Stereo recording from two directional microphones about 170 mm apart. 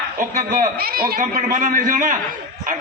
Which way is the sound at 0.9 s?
55° right (ahead or behind).